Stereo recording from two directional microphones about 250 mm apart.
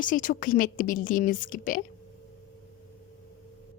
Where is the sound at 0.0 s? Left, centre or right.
Left.